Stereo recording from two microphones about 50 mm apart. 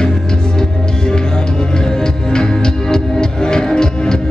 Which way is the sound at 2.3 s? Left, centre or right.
Centre.